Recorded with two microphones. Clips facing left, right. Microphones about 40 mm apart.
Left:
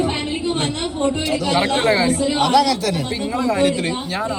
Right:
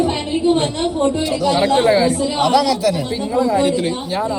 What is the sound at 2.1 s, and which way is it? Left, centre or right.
Speech, centre.